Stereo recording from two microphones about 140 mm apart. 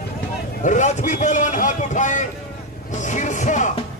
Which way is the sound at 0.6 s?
60° left (ahead or behind).